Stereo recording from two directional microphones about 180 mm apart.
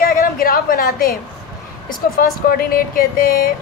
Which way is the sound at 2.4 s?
55° left (ahead or behind).